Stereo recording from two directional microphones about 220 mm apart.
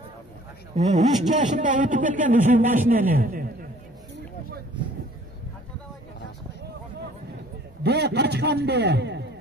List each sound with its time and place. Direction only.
0.7 s a man's voice: 30° right (ahead or behind)
7.8 s a man's voice: 50° right (ahead or behind)